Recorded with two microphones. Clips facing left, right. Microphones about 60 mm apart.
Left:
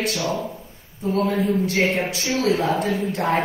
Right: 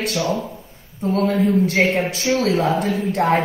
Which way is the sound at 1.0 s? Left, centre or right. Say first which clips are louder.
Right 2 dB; right.